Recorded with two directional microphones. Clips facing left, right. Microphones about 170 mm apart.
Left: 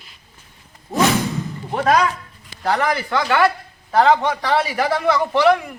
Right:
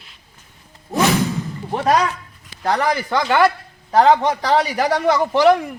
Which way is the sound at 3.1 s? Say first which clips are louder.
Right 2 dB; 20° right (ahead or behind).